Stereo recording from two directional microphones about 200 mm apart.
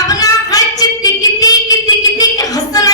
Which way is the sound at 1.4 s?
20° left (ahead or behind).